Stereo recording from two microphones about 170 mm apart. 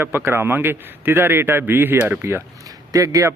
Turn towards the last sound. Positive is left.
turn(degrees=-20)  # may be behind; listen again after turning